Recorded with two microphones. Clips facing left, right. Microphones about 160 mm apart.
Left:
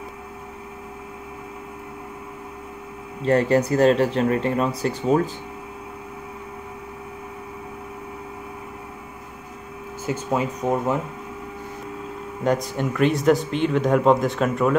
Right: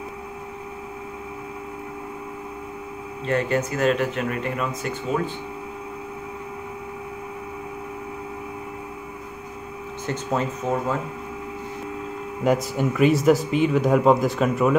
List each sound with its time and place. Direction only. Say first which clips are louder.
3.3 s speech: left 5 dB; 35° left (ahead or behind)
10.0 s speech: left 2 dB; 10° left (ahead or behind)
12.4 s speech: right 1 dB; 5° right (ahead or behind)